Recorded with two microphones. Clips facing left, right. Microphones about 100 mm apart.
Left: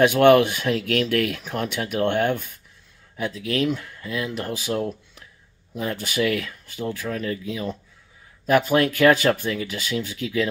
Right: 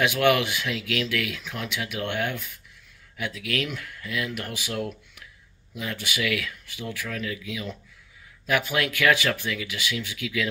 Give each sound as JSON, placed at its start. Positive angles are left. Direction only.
{"t": 0.0, "sound": "speech", "side_deg": 40}